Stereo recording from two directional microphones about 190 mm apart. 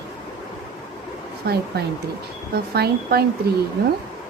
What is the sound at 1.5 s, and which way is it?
Speech, 60° right (ahead or behind).